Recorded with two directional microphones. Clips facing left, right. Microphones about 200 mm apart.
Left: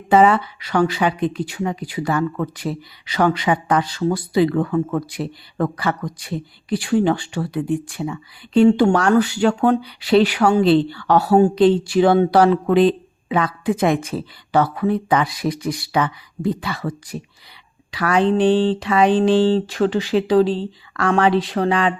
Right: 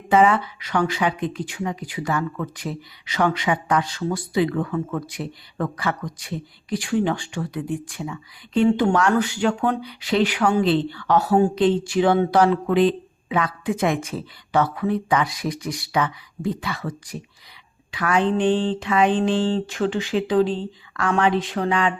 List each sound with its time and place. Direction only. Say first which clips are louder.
0.1 s speech: left 3 dB; 35° left (ahead or behind)